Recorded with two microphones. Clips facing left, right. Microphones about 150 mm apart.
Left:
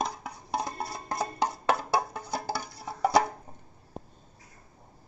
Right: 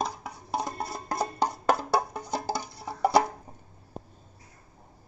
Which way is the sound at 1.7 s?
15° right (ahead or behind).